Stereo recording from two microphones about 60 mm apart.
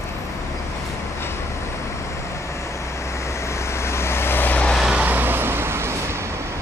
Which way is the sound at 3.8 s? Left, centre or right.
Left.